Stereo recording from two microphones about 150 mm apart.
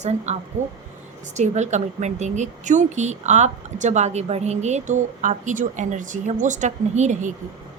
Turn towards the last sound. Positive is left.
turn(degrees=-50)  # may be behind; listen again after turning